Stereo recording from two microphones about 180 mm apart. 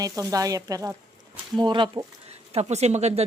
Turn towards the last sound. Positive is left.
turn(degrees=-35)  # may be behind; listen again after turning